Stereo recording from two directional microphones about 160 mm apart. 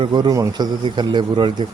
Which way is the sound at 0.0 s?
30° right (ahead or behind).